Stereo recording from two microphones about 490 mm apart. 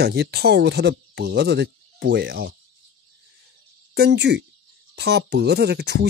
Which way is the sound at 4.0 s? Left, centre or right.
Centre.